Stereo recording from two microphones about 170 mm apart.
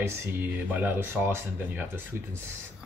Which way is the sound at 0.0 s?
10° right (ahead or behind).